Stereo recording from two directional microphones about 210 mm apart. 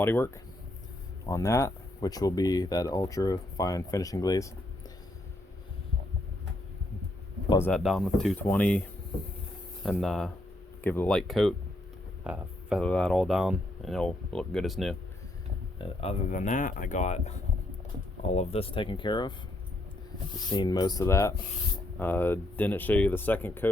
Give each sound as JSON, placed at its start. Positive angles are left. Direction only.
{"t": 0.0, "sound": "speech", "side_deg": 10}
{"t": 7.7, "sound": "speech", "side_deg": 0}
{"t": 9.8, "sound": "speech", "side_deg": 0}
{"t": 15.8, "sound": "speech", "side_deg": 30}
{"t": 20.5, "sound": "speech", "side_deg": 20}